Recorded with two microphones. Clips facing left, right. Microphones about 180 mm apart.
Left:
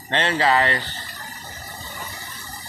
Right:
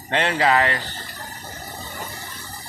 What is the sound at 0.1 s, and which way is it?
Speech, 10° right (ahead or behind).